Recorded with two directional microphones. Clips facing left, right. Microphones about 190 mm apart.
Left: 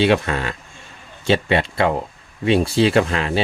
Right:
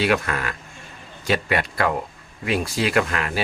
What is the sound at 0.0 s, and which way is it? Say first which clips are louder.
Speech: left 4 dB; 25° left (ahead or behind).